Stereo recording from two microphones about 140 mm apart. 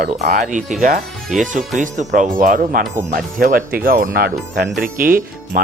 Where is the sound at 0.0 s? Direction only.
70° right (ahead or behind).